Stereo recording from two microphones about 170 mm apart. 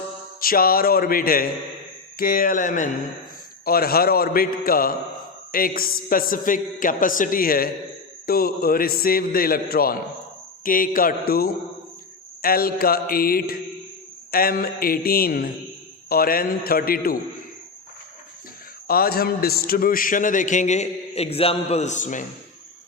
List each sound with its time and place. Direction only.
0.3 s a man's voice: 60° left (ahead or behind)
3.7 s a man's voice: 60° left (ahead or behind)
18.9 s a man's voice: 60° left (ahead or behind)